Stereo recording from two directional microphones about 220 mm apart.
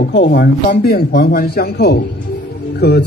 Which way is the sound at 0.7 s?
40° left (ahead or behind).